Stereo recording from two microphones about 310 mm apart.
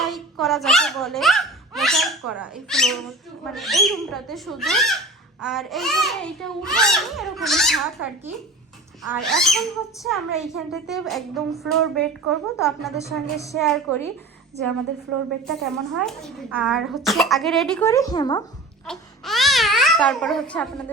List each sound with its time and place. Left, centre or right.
0.0 s baby laughter: centre
2.3 s speech: centre
15.4 s speech: centre
18.9 s baby cry: centre